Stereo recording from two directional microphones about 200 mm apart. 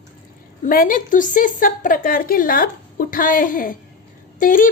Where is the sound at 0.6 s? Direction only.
45° left (ahead or behind).